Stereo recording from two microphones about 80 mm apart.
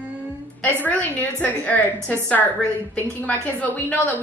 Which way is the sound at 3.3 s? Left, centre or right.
Centre.